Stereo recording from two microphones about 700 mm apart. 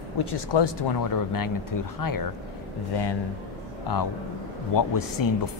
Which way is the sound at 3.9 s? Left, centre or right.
Left.